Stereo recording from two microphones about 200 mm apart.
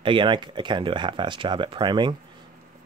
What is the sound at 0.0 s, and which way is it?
Speech, 25° right (ahead or behind).